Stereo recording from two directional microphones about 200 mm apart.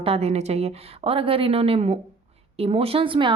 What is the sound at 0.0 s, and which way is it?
A woman's voice, 30° right (ahead or behind).